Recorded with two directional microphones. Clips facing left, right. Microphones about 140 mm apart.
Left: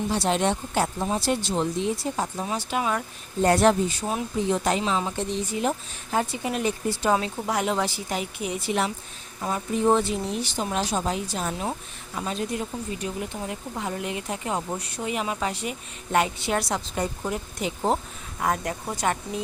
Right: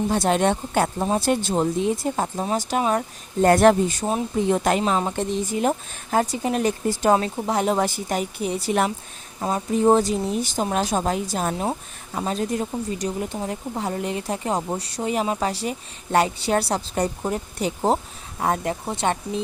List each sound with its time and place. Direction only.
0.1 s a woman's voice: 50° right (ahead or behind)
3.4 s a woman's voice: 50° right (ahead or behind); by 19.1 s 25° right (ahead or behind)